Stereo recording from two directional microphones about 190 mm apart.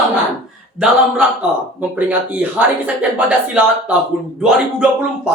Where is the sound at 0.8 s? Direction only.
5° right (ahead or behind).